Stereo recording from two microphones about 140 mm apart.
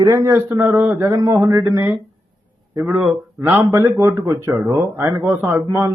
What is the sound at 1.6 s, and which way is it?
Speech, 15° right (ahead or behind).